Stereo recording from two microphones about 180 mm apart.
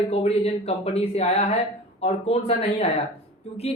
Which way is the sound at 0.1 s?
35° left (ahead or behind).